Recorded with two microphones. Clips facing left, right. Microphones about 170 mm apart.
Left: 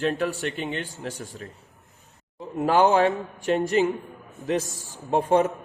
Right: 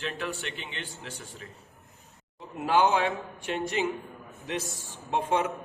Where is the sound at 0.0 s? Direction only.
40° left (ahead or behind).